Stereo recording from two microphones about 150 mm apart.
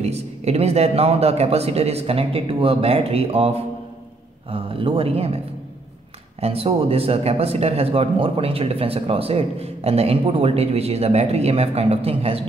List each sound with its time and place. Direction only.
0.0 s speech: 45° right (ahead or behind)
6.4 s speech: 40° right (ahead or behind)